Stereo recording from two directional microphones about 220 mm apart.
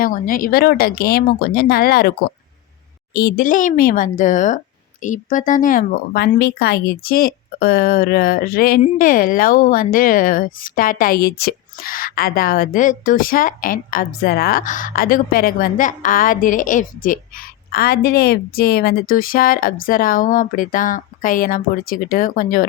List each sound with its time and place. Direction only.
0.0 s speech: 40° left (ahead or behind)